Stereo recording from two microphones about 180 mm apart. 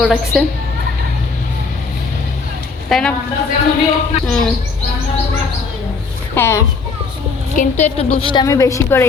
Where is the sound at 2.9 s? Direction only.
Centre (ahead or behind).